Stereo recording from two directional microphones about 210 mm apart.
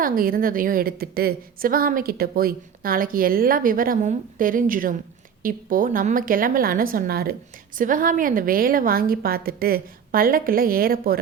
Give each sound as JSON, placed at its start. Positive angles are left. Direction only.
{"t": 0.0, "sound": "a woman's voice", "side_deg": -45}